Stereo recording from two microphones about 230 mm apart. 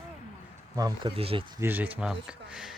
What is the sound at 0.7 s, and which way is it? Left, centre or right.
Speech, centre.